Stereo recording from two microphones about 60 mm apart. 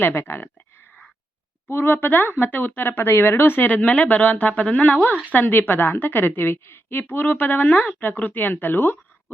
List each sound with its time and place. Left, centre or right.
0.0 s a woman's voice: left
1.6 s a woman's voice: left